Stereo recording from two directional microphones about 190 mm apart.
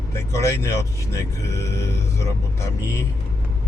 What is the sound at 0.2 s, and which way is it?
Speech, 15° left (ahead or behind).